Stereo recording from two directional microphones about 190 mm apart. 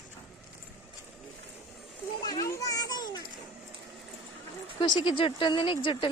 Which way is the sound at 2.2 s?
20° left (ahead or behind).